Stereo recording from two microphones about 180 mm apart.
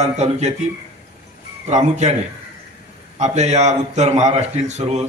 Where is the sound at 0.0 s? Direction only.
40° right (ahead or behind).